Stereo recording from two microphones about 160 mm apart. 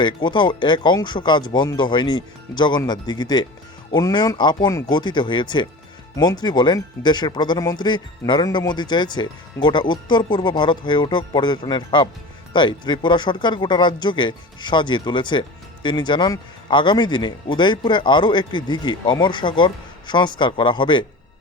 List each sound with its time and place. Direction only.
0.0 s speech: 30° left (ahead or behind)